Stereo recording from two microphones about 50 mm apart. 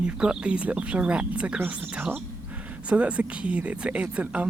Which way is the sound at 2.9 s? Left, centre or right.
Right.